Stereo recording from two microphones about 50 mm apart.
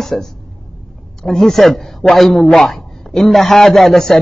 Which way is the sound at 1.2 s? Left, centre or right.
Centre.